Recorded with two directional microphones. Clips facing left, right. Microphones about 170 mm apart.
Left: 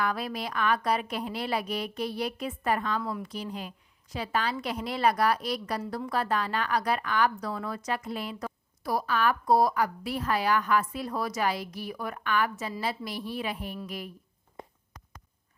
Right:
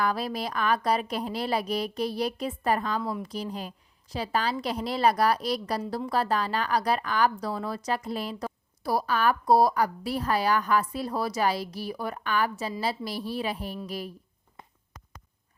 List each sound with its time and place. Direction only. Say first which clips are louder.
0.0 s a woman's voice: right 2 dB; 35° right (ahead or behind)
3.0 s a woman's voice: right 2 dB; 20° right (ahead or behind)
3.2 s a woman's voice: right 2 dB; 35° right (ahead or behind)